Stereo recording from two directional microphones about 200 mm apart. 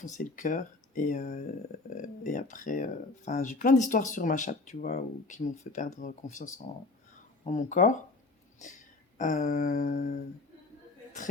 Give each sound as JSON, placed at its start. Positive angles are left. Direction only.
{"t": 0.0, "sound": "speech", "side_deg": 40}
{"t": 7.5, "sound": "speech", "side_deg": 40}
{"t": 9.1, "sound": "speech", "side_deg": 40}